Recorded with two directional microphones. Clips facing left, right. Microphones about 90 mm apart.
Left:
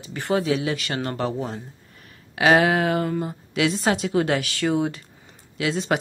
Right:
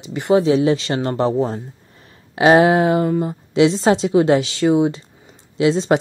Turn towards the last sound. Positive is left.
turn(degrees=-25)  # may be behind; listen again after turning